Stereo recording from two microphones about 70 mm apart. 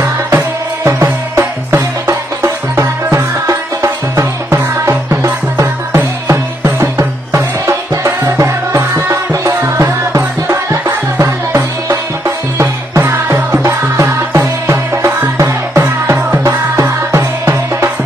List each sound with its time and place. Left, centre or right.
0.0 s music: right
6.2 s music: right
13.6 s music: right